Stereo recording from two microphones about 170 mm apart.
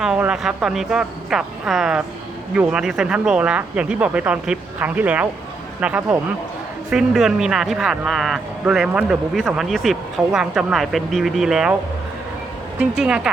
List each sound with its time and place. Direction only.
0.0 s speech: 5° right (ahead or behind)
12.8 s speech: 5° right (ahead or behind)